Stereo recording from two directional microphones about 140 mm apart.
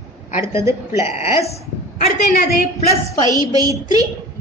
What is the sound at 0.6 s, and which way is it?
Speech, 20° right (ahead or behind).